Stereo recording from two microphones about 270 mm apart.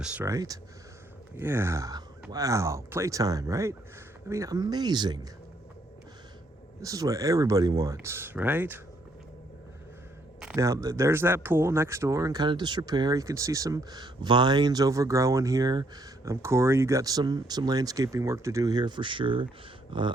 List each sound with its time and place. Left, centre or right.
0.0 s speech: centre
6.8 s speech: centre
10.4 s speech: centre